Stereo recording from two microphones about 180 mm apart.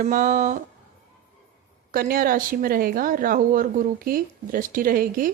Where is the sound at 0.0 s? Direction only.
50° right (ahead or behind).